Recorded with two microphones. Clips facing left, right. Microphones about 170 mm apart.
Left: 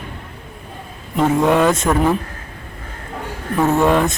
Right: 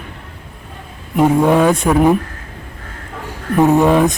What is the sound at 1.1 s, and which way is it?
Speech, 10° right (ahead or behind).